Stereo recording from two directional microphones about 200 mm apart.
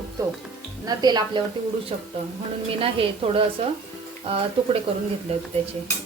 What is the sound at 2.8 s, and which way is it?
Speech, 25° right (ahead or behind).